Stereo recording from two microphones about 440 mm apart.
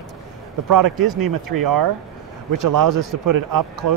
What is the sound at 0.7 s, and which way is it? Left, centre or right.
Speech, right.